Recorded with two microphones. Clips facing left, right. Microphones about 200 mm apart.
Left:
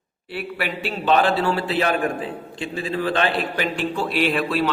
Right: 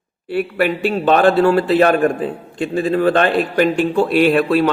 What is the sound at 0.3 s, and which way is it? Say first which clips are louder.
A man's voice: right 10 dB; 50° right (ahead or behind).